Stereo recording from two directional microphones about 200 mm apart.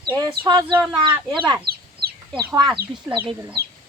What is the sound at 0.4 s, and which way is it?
Bird, 20° right (ahead or behind).